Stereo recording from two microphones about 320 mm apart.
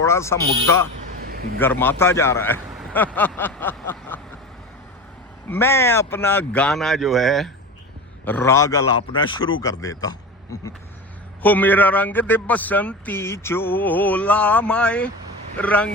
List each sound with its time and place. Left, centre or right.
0.0 s a man's voice: centre
1.2 s a sound: right
1.5 s a man's voice: centre
5.5 s a man's voice: centre